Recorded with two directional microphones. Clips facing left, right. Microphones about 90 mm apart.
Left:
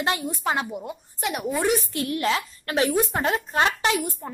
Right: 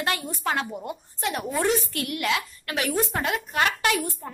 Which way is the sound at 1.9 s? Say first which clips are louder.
Left 3 dB; 25° left (ahead or behind).